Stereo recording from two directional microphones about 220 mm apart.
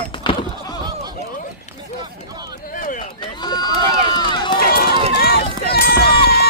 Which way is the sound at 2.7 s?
35° left (ahead or behind).